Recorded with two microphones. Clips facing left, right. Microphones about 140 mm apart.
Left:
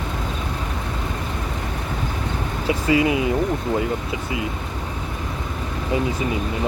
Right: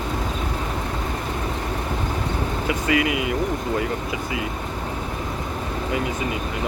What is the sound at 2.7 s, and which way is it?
Speech, 30° left (ahead or behind).